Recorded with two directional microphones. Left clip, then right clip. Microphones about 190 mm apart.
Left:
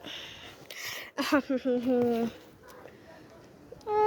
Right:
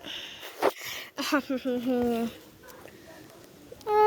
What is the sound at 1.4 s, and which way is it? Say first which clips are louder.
Speech: left 1 dB; 20° left (ahead or behind).